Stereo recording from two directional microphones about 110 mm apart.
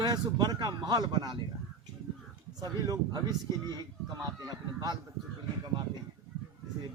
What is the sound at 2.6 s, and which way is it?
Speech, 35° right (ahead or behind).